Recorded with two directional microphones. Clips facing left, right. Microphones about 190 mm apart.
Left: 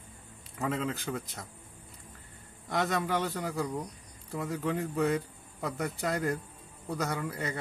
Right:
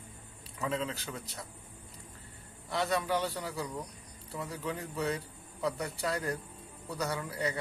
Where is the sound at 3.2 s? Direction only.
50° left (ahead or behind).